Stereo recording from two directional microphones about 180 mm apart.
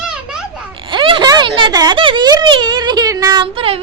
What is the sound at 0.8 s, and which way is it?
Speech, 25° right (ahead or behind).